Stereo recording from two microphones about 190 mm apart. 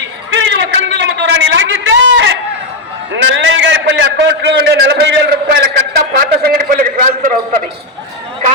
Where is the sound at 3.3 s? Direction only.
70° right (ahead or behind); by 7.3 s 50° right (ahead or behind).